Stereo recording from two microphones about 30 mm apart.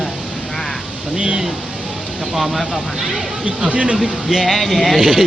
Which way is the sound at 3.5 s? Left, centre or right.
Right.